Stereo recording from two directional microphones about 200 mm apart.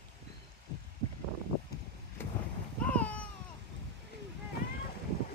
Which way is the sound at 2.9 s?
5° left (ahead or behind).